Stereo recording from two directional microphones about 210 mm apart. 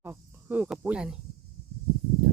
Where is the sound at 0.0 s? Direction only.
10° right (ahead or behind).